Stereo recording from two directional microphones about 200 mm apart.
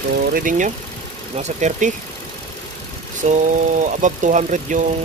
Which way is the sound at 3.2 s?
40° right (ahead or behind).